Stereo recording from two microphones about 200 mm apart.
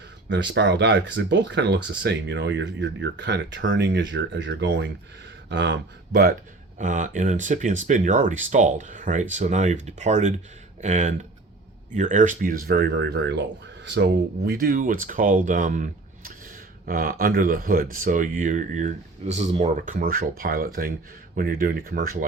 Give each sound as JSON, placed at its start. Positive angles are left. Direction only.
{"t": 0.3, "sound": "speech", "side_deg": -65}
{"t": 6.7, "sound": "speech", "side_deg": -40}